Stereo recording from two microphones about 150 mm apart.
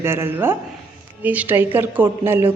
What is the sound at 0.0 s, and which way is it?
A woman's voice, 15° right (ahead or behind).